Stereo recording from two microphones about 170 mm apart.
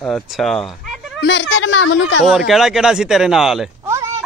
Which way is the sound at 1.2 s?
90° left.